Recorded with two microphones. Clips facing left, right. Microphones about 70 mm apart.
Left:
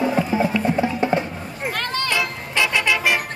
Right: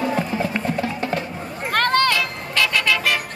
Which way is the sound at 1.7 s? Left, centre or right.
Right.